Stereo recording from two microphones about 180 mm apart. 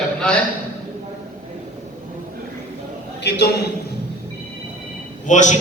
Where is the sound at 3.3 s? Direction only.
70° left (ahead or behind).